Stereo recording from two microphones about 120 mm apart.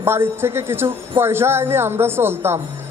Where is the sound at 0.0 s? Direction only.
20° right (ahead or behind).